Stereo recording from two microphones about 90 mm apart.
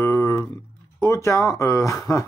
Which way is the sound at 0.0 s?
25° left (ahead or behind).